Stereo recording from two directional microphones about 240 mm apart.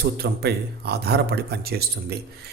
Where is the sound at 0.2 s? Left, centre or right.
Right.